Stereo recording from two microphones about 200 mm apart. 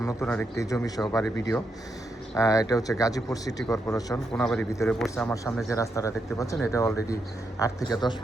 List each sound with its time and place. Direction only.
0.0 s a man's voice: 10° left (ahead or behind)
2.3 s a man's voice: 15° left (ahead or behind)